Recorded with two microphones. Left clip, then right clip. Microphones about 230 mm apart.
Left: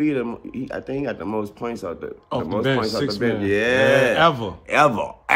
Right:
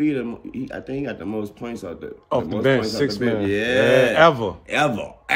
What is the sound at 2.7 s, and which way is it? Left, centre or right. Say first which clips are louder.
Speech: right 1 dB; centre.